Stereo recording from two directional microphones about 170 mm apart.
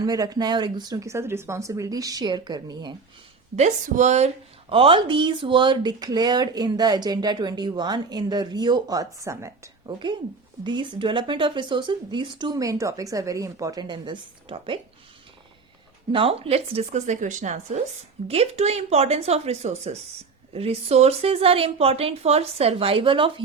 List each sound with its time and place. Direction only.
0.0 s speech: 20° right (ahead or behind)
3.5 s speech: 45° right (ahead or behind)
4.7 s speech: 30° right (ahead or behind)
16.1 s a woman's voice: 35° right (ahead or behind)